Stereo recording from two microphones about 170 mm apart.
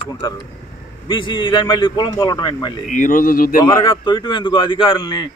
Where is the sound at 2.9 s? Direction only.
50° left (ahead or behind).